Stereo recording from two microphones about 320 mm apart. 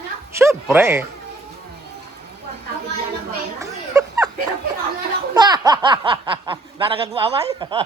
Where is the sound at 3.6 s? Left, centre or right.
Centre.